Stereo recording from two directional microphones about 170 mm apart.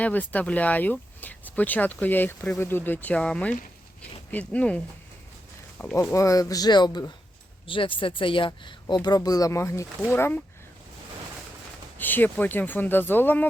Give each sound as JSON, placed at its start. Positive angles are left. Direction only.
{"t": 0.0, "sound": "speech", "side_deg": 10}
{"t": 5.8, "sound": "speech", "side_deg": 10}
{"t": 11.9, "sound": "speech", "side_deg": 10}